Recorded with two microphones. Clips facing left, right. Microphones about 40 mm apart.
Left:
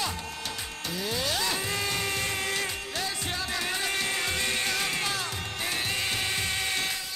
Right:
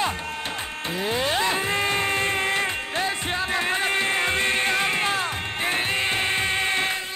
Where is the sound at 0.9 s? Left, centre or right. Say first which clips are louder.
Right 6 dB; right.